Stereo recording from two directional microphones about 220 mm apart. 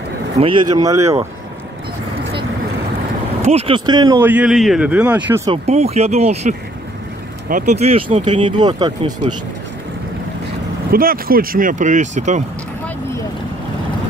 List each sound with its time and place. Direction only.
0.4 s speech: 20° right (ahead or behind)
3.4 s speech: 25° right (ahead or behind); by 5.5 s 10° right (ahead or behind)
5.5 s speech: 30° right (ahead or behind)
10.9 s speech: 40° right (ahead or behind)